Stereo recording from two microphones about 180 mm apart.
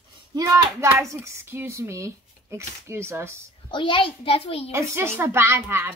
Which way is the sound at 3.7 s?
25° left (ahead or behind).